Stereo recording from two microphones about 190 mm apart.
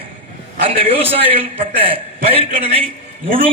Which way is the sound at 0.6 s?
30° right (ahead or behind).